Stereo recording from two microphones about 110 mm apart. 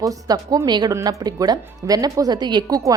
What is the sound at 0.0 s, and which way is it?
A woman's voice, 35° right (ahead or behind).